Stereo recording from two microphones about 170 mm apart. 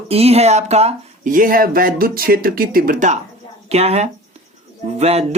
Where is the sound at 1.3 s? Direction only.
55° right (ahead or behind).